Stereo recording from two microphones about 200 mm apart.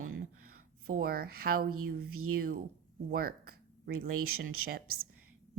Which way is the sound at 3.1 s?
50° right (ahead or behind).